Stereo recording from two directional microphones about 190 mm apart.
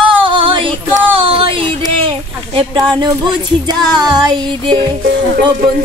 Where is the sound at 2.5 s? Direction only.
25° right (ahead or behind).